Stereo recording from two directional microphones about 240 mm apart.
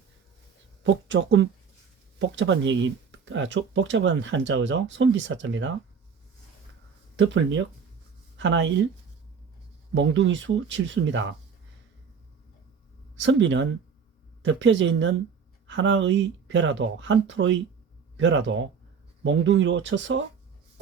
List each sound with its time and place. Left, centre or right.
0.8 s speech: right
7.2 s speech: right
9.9 s speech: right
13.1 s speech: right